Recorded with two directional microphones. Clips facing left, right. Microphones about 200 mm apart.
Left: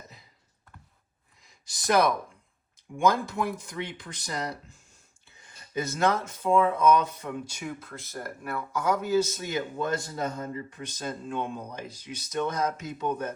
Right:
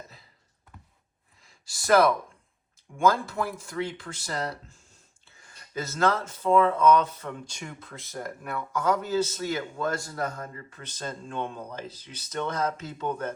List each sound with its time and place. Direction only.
1.5 s speech: 20° left (ahead or behind)